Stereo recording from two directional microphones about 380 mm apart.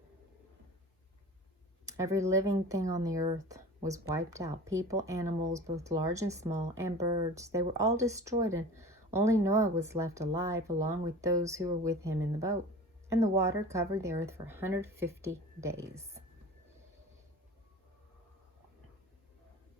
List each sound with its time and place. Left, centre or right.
1.9 s speech: centre